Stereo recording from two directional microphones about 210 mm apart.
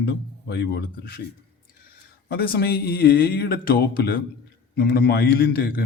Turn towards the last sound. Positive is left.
turn(degrees=45)  # may be behind; listen again after turning